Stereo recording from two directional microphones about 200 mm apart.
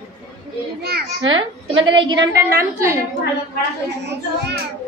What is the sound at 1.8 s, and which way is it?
A woman's voice, 25° right (ahead or behind).